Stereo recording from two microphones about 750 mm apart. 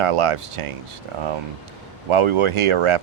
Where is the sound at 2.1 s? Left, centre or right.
Right.